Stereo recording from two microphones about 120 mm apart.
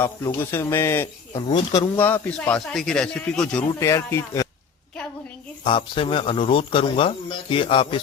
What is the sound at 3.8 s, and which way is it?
Speech, 25° left (ahead or behind).